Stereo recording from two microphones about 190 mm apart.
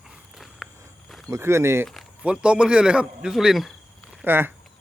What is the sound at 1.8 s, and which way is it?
Speech, 5° right (ahead or behind).